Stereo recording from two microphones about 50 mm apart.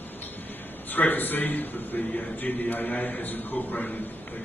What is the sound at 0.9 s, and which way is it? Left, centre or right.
A man's voice, left.